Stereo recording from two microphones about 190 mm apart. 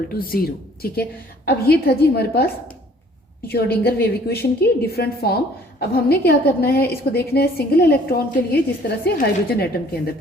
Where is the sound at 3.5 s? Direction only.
55° left (ahead or behind).